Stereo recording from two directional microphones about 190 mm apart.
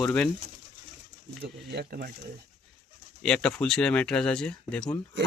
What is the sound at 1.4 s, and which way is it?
Speech, 55° right (ahead or behind).